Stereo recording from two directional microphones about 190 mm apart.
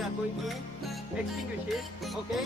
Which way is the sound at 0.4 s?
Centre (ahead or behind).